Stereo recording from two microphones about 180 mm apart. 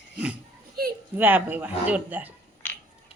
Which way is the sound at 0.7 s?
55° right (ahead or behind).